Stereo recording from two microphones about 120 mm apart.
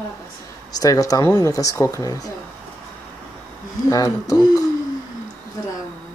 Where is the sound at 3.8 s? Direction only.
30° left (ahead or behind).